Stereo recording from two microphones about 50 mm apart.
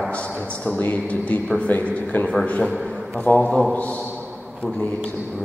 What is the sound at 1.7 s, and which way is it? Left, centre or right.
Speech, left.